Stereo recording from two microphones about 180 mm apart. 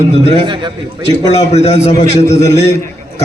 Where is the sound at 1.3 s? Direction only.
35° left (ahead or behind).